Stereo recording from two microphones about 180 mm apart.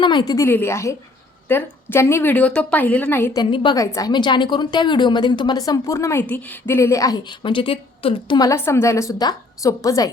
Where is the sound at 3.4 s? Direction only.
25° left (ahead or behind).